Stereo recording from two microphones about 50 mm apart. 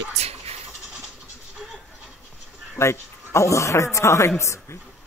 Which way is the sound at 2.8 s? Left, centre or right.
Left.